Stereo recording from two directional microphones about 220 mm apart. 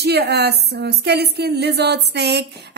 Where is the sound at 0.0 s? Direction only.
50° right (ahead or behind).